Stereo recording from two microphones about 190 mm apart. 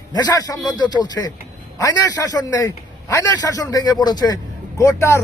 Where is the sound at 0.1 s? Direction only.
20° left (ahead or behind).